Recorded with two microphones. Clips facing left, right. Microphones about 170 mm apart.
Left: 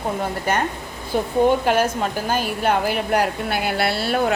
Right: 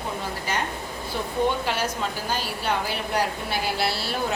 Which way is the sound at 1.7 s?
50° left (ahead or behind).